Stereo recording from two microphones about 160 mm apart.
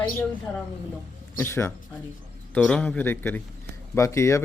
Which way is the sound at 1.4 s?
15° left (ahead or behind).